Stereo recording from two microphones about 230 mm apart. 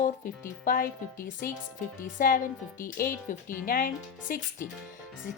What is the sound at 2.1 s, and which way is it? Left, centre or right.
Speech, left.